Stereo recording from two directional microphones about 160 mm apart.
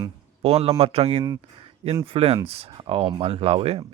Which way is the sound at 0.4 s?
40° right (ahead or behind).